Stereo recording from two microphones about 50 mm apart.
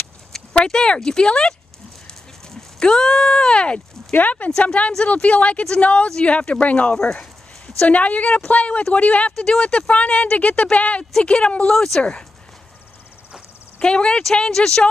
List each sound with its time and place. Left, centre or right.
0.3 s speech: centre
2.5 s speech: centre
4.1 s speech: left
4.5 s speech: centre
9.4 s speech: centre
11.7 s speech: centre
13.7 s speech: centre